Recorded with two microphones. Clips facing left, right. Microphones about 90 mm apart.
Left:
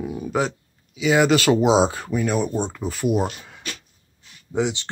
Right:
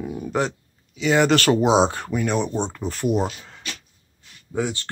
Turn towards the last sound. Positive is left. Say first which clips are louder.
# left 2 dB
turn(degrees=20)  # may be behind; listen again after turning